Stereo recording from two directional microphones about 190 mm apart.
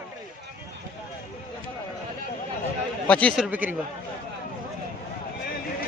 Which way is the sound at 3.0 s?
5° left (ahead or behind).